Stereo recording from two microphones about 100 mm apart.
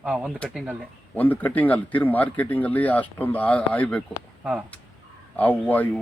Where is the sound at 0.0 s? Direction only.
15° right (ahead or behind).